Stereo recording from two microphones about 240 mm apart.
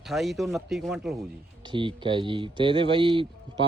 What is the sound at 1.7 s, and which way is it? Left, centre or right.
Speech, centre.